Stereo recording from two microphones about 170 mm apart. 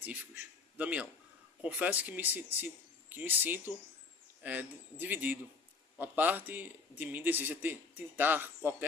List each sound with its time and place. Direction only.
0.0 s a man's voice: 10° right (ahead or behind)